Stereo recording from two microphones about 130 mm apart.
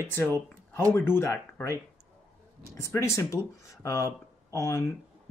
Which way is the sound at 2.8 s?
20° left (ahead or behind).